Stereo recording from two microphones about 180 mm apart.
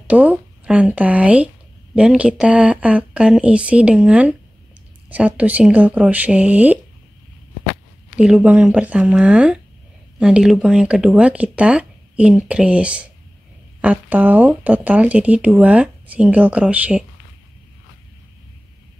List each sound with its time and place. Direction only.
0.0 s speech: 5° right (ahead or behind)
8.2 s speech: 5° right (ahead or behind)